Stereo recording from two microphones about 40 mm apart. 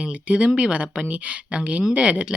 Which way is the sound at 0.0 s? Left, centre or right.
Right.